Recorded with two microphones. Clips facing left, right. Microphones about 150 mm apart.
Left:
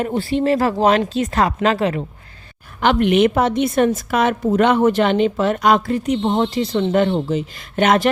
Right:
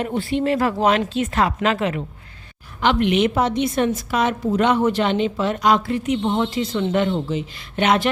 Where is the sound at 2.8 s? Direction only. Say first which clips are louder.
Left 3 dB; 50° left (ahead or behind).